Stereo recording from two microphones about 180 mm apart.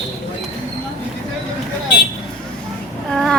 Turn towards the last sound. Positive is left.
turn(degrees=0)  # may be behind; listen again after turning